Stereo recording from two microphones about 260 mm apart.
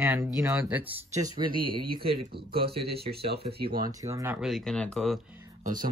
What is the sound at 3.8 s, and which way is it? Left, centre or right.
Speech, centre.